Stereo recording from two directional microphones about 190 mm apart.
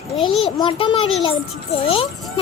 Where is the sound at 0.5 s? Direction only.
25° left (ahead or behind).